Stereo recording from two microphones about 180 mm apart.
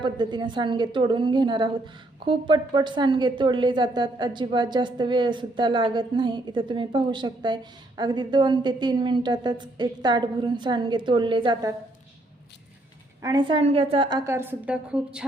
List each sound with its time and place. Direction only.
0.0 s a woman's voice: 25° right (ahead or behind)
13.2 s a woman's voice: 25° right (ahead or behind); by 15.2 s 5° right (ahead or behind)